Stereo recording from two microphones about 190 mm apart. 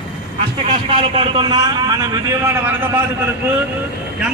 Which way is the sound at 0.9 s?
25° right (ahead or behind).